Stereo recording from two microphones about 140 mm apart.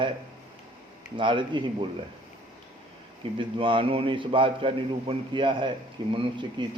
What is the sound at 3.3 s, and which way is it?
A man's voice, 35° right (ahead or behind).